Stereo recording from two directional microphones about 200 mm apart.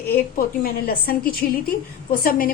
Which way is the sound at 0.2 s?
45° left (ahead or behind).